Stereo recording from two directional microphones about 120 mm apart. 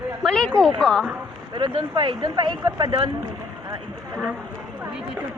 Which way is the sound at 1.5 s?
45° right (ahead or behind).